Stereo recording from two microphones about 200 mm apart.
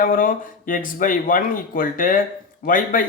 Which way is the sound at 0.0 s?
45° left (ahead or behind).